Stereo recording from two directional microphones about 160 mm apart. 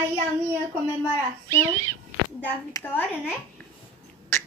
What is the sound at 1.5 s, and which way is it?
Speech, 15° left (ahead or behind).